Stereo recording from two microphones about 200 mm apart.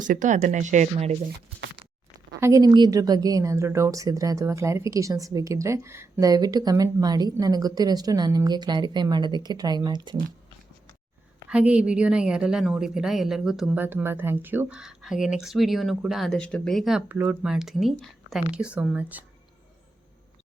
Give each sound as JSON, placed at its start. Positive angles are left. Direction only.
{"t": 0.0, "sound": "speech", "side_deg": -40}
{"t": 2.4, "sound": "a woman's voice", "side_deg": -15}
{"t": 11.4, "sound": "a woman's voice", "side_deg": -5}